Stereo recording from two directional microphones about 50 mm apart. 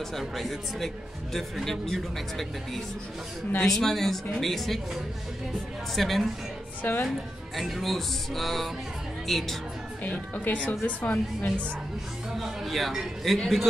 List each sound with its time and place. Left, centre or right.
0.2 s speech: centre
6.8 s a woman's voice: left
7.5 s speech: centre
10.0 s a woman's voice: left
12.6 s speech: centre